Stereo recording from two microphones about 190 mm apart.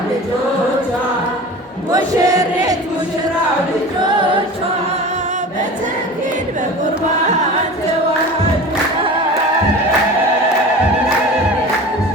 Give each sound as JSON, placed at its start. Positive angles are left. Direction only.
{"t": 1.9, "sound": "chant", "side_deg": -20}